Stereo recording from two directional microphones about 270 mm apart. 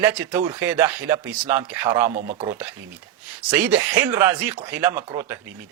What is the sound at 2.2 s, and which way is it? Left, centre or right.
Speech, right.